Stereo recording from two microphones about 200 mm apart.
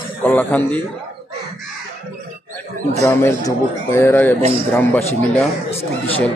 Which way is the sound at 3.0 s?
15° left (ahead or behind).